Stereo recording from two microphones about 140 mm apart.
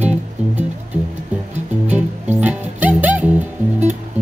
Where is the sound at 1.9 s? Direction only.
10° right (ahead or behind).